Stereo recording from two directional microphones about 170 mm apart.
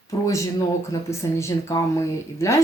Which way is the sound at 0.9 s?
15° left (ahead or behind).